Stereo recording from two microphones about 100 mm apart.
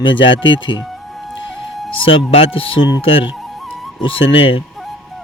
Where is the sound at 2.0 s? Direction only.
65° left (ahead or behind).